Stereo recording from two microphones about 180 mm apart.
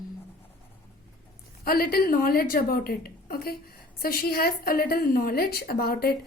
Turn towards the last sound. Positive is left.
turn(degrees=55)  # may be behind; listen again after turning